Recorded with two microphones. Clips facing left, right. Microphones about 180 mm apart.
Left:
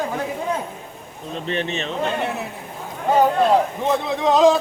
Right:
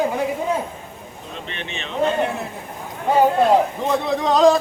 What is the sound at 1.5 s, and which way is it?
Speech, 40° left (ahead or behind).